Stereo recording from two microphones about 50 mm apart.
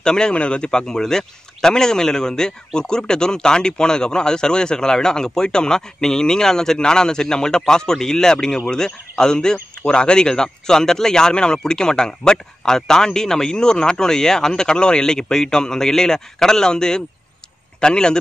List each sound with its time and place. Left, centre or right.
0.0 s speech: centre